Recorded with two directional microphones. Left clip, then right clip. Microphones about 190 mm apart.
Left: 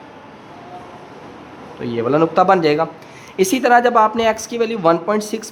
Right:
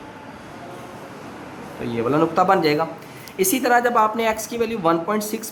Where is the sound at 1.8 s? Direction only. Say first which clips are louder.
Left 4 dB; 30° left (ahead or behind).